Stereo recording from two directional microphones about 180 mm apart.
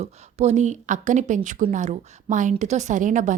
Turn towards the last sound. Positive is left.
turn(degrees=-45)  # may be behind; listen again after turning